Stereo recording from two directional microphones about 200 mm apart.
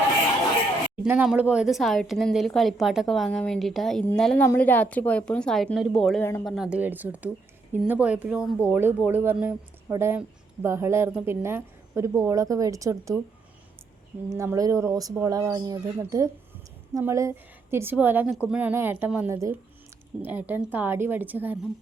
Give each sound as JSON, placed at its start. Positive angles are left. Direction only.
{"t": 1.0, "sound": "a woman's voice", "side_deg": -5}
{"t": 14.3, "sound": "speech", "side_deg": -15}